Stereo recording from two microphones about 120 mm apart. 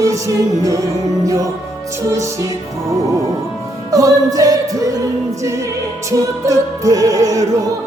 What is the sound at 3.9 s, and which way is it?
Music, 30° right (ahead or behind).